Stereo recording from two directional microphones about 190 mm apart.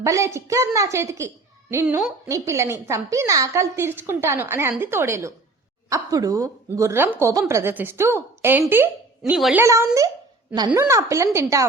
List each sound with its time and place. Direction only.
0.0 s a woman's voice: 15° right (ahead or behind)
9.6 s a woman's voice: 15° right (ahead or behind)